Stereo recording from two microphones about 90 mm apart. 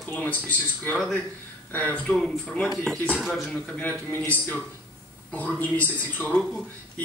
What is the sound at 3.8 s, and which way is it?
Speech, 20° left (ahead or behind).